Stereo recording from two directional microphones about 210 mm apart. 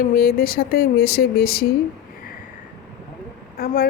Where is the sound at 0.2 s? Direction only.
45° left (ahead or behind).